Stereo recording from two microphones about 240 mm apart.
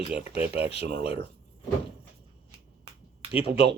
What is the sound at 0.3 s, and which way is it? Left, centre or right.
Speech, left.